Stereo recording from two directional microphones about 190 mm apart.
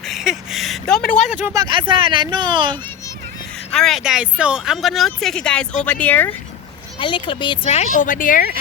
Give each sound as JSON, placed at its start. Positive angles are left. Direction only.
{"t": 0.0, "sound": "a sound", "side_deg": 0}
{"t": 1.2, "sound": "speech", "side_deg": 40}
{"t": 1.5, "sound": "speech", "side_deg": -20}
{"t": 3.7, "sound": "speech", "side_deg": 0}
{"t": 7.0, "sound": "speech", "side_deg": 25}
{"t": 7.6, "sound": "speech", "side_deg": 40}